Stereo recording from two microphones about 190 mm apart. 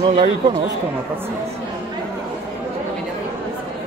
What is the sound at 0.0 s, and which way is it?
Speech, 25° right (ahead or behind).